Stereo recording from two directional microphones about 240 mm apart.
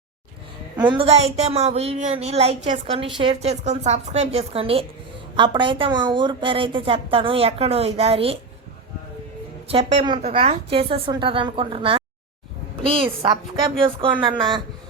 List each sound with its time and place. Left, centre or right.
0.9 s a woman's voice: right
9.6 s a woman's voice: right